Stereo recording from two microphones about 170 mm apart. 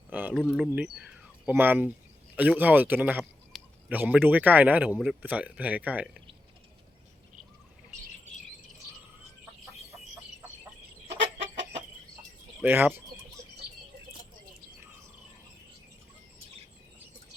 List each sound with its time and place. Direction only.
0.1 s a sound: 10° right (ahead or behind)
0.3 s a man's voice: centre (ahead or behind)
12.6 s a man's voice: 10° right (ahead or behind)